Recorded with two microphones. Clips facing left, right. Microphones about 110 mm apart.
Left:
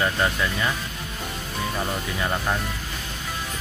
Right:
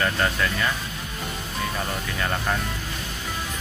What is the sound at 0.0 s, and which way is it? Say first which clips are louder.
Speech: even; 15° left (ahead or behind).